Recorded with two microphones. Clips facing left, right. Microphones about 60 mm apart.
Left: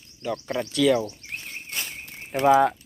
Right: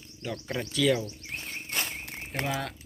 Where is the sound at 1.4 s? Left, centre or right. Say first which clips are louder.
Right 2 dB; right.